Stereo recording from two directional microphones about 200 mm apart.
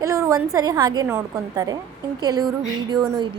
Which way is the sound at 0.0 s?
15° right (ahead or behind).